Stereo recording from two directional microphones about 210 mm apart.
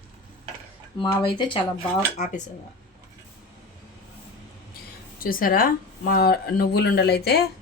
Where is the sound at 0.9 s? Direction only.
25° left (ahead or behind).